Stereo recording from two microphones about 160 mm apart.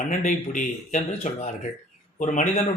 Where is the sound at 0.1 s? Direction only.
45° left (ahead or behind).